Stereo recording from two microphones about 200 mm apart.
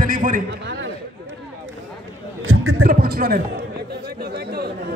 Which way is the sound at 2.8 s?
50° right (ahead or behind).